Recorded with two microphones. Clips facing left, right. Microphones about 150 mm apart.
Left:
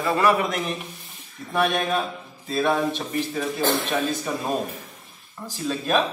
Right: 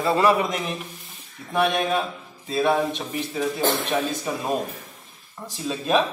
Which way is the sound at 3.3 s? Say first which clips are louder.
Right 2 dB; centre (ahead or behind).